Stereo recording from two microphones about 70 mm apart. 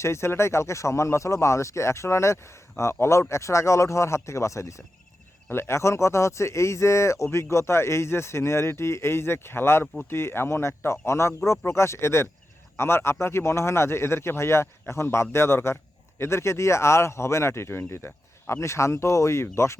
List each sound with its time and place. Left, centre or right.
0.0 s speech: left
9.8 s speech: centre
10.1 s speech: left